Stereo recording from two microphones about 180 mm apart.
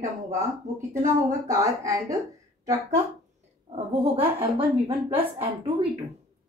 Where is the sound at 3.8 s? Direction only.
30° right (ahead or behind).